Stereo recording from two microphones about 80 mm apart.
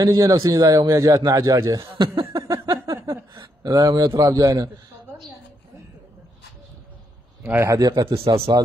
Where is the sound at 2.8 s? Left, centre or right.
Right.